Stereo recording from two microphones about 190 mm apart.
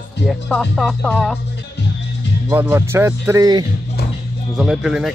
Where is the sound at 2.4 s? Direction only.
10° right (ahead or behind).